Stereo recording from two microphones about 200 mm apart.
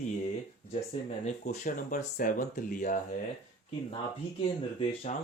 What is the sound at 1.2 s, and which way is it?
Speech, 40° left (ahead or behind).